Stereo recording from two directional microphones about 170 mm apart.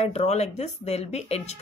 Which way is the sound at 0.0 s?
40° left (ahead or behind).